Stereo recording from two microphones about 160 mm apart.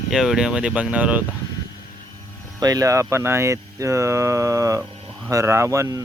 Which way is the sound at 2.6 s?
25° right (ahead or behind).